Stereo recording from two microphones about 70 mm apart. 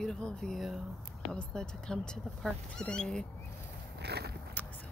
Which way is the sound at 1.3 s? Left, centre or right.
Centre.